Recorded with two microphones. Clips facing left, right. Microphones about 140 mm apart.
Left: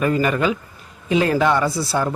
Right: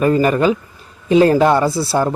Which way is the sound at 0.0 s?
35° right (ahead or behind).